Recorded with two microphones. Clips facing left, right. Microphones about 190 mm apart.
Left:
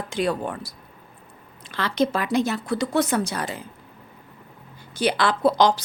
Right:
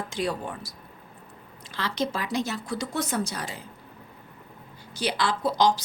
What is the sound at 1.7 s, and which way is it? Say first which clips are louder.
A woman's voice: left 6 dB; 60° left (ahead or behind).